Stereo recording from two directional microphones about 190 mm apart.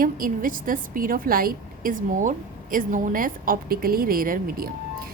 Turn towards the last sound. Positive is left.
turn(degrees=-50)  # may be behind; listen again after turning